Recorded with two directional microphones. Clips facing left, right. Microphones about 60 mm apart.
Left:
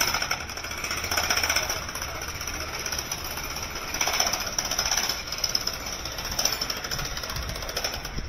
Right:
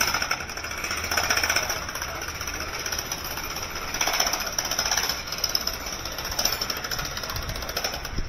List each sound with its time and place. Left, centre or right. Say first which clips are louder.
0.0 s jackhammer: right 2 dB; right
4.2 s jackhammer: right 1 dB; right